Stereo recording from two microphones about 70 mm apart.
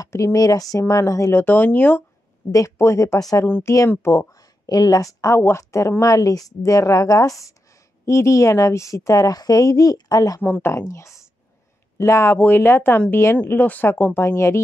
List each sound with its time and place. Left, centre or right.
0.0 s speech: left
1.3 s speech: left
2.5 s speech: left
3.2 s speech: left
3.9 s speech: left
4.3 s a sound: left
5.3 s speech: left
10.4 s speech: left
10.7 s speech: left
12.4 s speech: left
14.2 s speech: left